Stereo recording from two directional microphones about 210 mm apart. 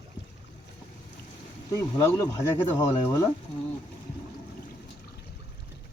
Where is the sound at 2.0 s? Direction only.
15° left (ahead or behind).